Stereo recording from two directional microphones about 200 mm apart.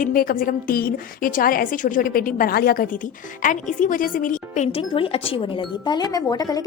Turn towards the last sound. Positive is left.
turn(degrees=20)  # may be behind; listen again after turning